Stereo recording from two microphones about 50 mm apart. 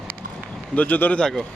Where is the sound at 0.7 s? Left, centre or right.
Left.